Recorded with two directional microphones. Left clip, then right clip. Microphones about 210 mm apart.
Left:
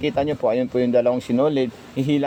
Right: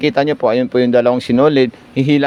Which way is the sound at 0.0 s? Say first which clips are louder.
Right 7 dB; 20° right (ahead or behind).